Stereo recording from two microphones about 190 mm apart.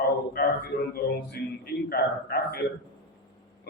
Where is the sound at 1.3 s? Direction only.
55° left (ahead or behind).